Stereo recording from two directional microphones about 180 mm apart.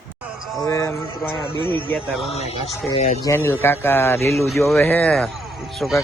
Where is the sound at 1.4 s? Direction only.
25° right (ahead or behind).